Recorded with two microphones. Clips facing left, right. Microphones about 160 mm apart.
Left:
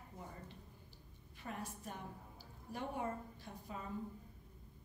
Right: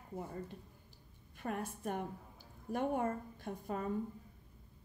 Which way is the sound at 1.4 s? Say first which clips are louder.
Right 7 dB; 50° right (ahead or behind).